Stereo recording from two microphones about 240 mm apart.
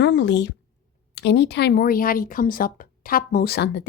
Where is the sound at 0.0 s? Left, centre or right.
Left.